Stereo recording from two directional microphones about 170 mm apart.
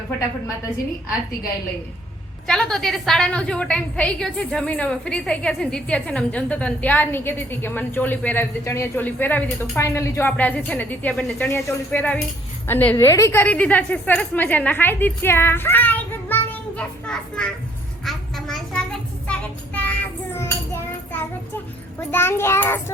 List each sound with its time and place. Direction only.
2.5 s a woman's voice: centre (ahead or behind)
18.0 s child singing: centre (ahead or behind)
22.1 s a woman's voice: 15° left (ahead or behind)